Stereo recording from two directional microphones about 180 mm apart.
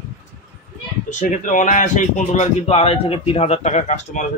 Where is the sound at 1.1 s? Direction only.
45° left (ahead or behind).